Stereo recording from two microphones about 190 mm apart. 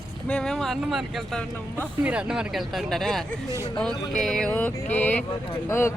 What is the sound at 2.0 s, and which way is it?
Speech, 5° right (ahead or behind).